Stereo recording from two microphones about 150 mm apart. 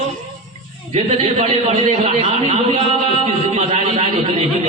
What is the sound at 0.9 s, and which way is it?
A man's voice, 45° right (ahead or behind).